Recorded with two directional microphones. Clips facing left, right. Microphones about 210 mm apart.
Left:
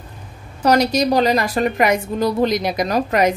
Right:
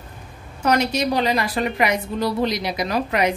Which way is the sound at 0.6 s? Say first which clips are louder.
Left 4 dB; 35° left (ahead or behind).